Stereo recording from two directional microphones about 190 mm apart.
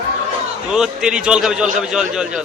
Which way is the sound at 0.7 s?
5° right (ahead or behind).